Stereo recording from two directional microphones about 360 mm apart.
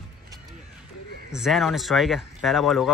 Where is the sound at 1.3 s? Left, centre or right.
Centre.